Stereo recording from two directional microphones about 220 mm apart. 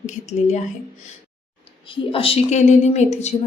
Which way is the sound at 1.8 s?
25° left (ahead or behind).